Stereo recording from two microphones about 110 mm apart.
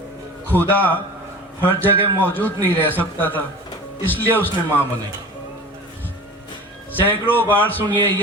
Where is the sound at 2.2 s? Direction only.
15° left (ahead or behind).